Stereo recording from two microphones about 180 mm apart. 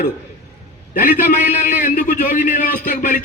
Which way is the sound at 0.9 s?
50° left (ahead or behind).